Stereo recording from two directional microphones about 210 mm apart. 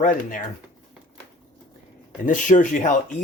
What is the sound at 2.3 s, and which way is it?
Speech, 40° left (ahead or behind).